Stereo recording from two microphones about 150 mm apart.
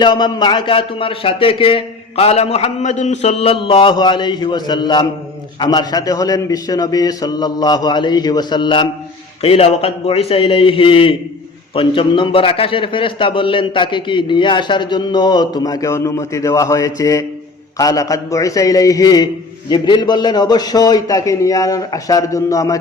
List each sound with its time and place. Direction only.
0.0 s a man's voice: 30° left (ahead or behind)